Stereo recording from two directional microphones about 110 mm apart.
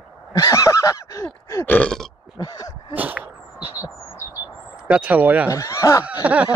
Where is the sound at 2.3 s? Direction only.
35° left (ahead or behind).